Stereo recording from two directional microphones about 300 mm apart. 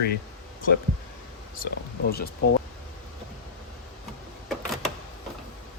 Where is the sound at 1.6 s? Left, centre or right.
Left.